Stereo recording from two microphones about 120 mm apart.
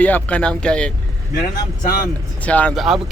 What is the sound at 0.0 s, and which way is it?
Speech, 10° left (ahead or behind).